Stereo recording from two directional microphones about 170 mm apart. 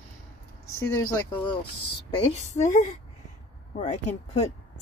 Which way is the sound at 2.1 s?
40° left (ahead or behind).